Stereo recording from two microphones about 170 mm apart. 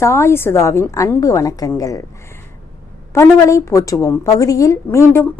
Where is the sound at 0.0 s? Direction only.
15° left (ahead or behind).